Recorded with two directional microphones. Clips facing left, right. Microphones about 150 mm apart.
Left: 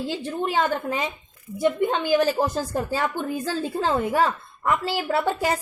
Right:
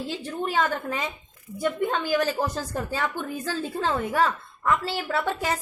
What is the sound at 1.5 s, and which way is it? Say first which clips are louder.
A woman's voice: left 4 dB; 15° left (ahead or behind).